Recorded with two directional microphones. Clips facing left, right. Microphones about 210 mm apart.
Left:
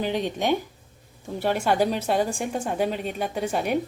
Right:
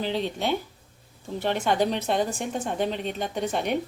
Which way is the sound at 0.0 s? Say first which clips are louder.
Left 2 dB; 15° left (ahead or behind).